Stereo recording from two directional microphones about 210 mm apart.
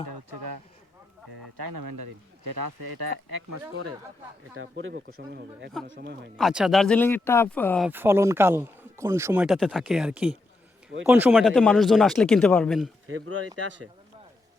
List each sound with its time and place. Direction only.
4.5 s speech: 65° right (ahead or behind)
5.3 s speech: 50° right (ahead or behind)
6.3 s speech: 5° right (ahead or behind)
7.9 s speech: 10° right (ahead or behind)
13.1 s speech: 90° right